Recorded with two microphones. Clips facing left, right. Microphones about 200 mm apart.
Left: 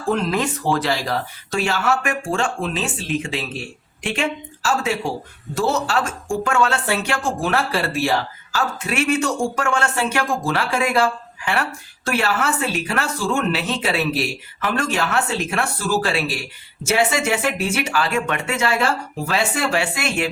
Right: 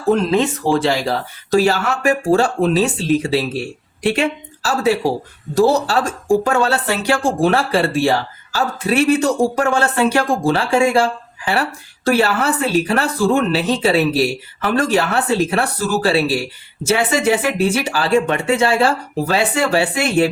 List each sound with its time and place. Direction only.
0.3 s speech: 25° right (ahead or behind)